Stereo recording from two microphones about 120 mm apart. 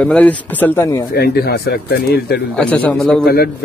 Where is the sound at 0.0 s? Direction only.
10° left (ahead or behind).